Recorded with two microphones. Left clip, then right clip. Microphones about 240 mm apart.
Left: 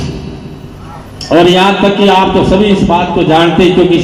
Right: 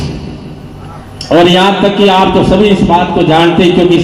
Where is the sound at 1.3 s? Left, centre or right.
Right.